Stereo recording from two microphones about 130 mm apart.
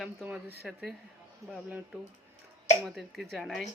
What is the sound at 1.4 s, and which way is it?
Speech, 25° right (ahead or behind).